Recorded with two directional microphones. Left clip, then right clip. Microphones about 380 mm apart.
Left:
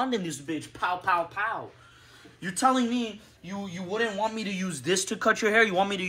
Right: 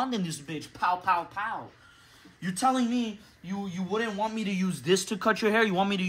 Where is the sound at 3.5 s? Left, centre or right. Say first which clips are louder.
Right 1 dB; right.